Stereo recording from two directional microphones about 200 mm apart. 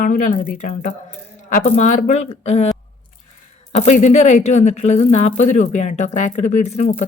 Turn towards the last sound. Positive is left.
turn(degrees=35)  # may be behind; listen again after turning